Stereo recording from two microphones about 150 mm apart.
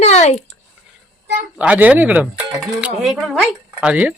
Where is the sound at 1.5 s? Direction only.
10° right (ahead or behind).